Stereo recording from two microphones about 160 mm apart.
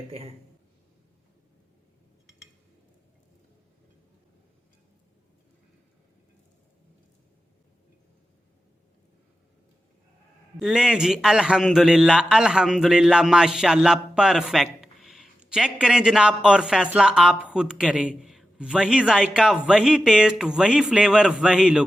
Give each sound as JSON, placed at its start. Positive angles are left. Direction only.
{"t": 0.1, "sound": "a man's voice", "side_deg": -40}
{"t": 10.6, "sound": "a man's voice", "side_deg": -5}